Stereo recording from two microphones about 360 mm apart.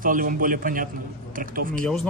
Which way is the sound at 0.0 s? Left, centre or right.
Right.